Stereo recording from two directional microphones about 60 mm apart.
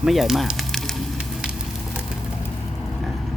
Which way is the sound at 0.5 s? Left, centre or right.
Centre.